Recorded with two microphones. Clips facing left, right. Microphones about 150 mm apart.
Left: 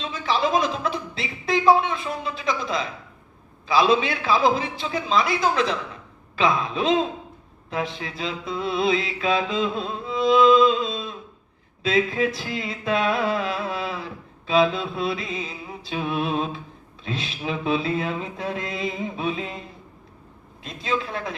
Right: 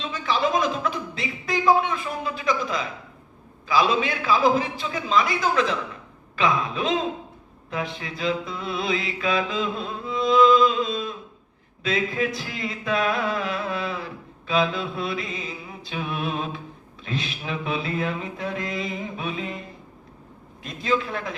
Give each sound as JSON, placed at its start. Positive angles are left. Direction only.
{"t": 0.1, "sound": "a sound", "side_deg": 30}
{"t": 3.7, "sound": "music", "side_deg": 25}
{"t": 20.7, "sound": "music", "side_deg": 25}